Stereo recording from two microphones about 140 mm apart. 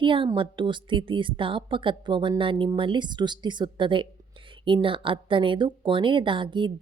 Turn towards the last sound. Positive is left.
turn(degrees=-35)  # may be behind; listen again after turning